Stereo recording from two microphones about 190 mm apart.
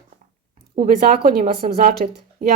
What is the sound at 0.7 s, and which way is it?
Speech, 45° right (ahead or behind).